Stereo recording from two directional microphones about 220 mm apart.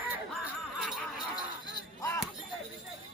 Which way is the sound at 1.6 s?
15° left (ahead or behind).